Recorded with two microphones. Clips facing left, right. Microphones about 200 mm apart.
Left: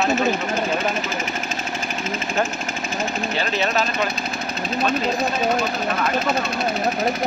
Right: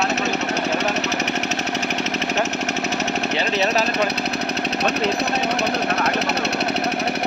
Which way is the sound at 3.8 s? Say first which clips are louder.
Right 3 dB; 70° right (ahead or behind).